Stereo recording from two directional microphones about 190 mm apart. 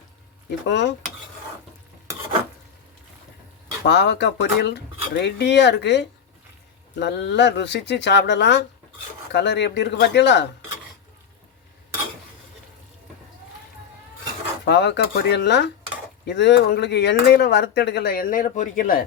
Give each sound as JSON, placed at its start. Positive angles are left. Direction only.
{"t": 0.7, "sound": "dishes", "side_deg": 65}
{"t": 3.8, "sound": "speech", "side_deg": 65}
{"t": 14.6, "sound": "speech", "side_deg": 65}